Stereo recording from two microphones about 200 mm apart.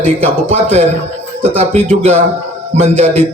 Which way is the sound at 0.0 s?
30° right (ahead or behind).